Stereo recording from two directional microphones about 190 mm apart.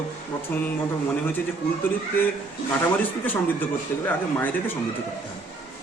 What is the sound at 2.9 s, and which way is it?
A man's voice, 10° left (ahead or behind).